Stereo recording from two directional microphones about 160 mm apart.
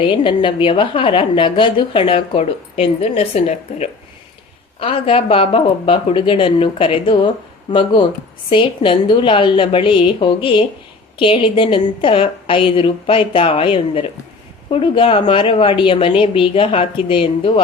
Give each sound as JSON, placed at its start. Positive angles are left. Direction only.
{"t": 0.0, "sound": "a woman's voice", "side_deg": 30}